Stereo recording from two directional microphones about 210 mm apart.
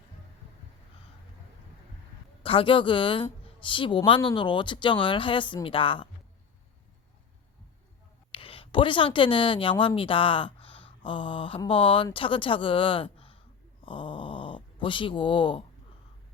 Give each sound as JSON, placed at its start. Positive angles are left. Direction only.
{"t": 2.4, "sound": "a woman's voice", "side_deg": 25}
{"t": 8.3, "sound": "speech", "side_deg": 25}
{"t": 13.8, "sound": "a sound", "side_deg": 25}